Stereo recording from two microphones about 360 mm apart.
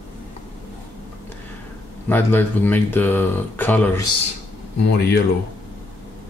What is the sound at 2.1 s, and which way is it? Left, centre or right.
Speech, centre.